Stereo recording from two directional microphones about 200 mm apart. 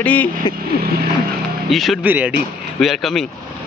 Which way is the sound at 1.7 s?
Centre (ahead or behind).